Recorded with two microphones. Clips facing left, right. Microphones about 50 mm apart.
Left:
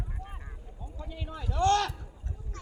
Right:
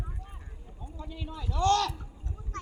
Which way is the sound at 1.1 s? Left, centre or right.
Left.